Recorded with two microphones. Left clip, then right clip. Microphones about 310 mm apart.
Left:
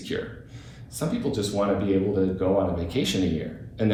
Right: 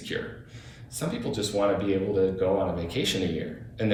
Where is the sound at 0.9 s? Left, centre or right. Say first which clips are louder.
Left 3 dB; centre.